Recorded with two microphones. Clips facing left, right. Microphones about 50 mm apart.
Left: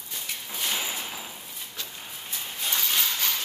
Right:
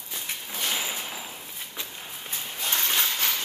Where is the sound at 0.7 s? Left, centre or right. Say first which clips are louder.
Even; centre.